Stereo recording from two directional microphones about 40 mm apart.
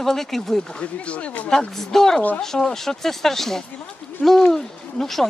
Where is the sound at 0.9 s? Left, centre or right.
Left.